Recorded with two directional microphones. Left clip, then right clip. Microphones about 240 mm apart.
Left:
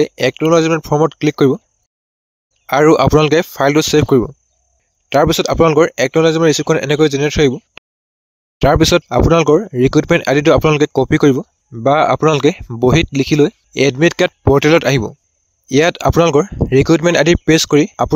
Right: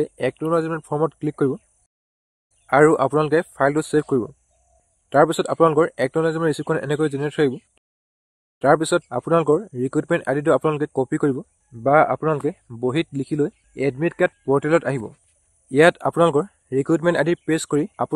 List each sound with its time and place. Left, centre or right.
0.0 s speech: left
2.6 s speech: left